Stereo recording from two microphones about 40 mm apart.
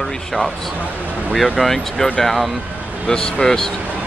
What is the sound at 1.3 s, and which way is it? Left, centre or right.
Speech, centre.